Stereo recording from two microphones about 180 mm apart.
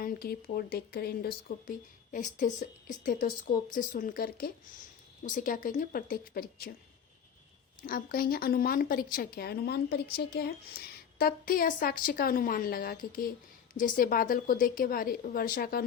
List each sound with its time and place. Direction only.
0.0 s speech: 60° left (ahead or behind)
2.1 s a woman's voice: 45° left (ahead or behind)
7.9 s a woman's voice: 50° left (ahead or behind)